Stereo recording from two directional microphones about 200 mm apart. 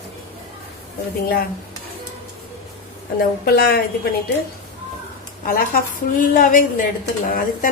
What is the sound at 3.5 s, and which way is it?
Speech, 50° left (ahead or behind).